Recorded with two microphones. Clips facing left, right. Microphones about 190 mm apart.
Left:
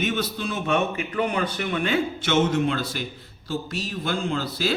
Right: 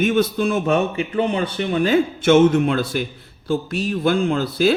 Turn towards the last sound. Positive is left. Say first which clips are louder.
# right 8 dB
turn(degrees=-55)  # may be behind; listen again after turning